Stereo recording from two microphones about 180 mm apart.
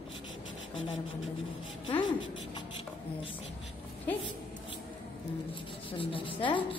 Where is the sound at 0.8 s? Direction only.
90° left.